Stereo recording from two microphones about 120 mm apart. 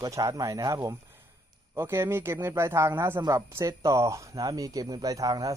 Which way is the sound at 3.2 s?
30° right (ahead or behind).